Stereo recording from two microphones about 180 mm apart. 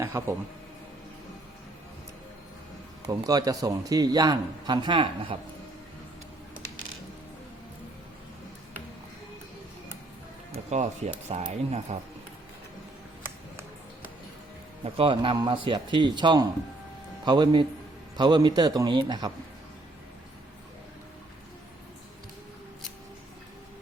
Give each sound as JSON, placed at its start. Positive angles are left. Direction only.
{"t": 0.0, "sound": "a man's voice", "side_deg": -15}
{"t": 3.1, "sound": "a man's voice", "side_deg": -20}
{"t": 10.5, "sound": "speech", "side_deg": -40}
{"t": 14.9, "sound": "a man's voice", "side_deg": -30}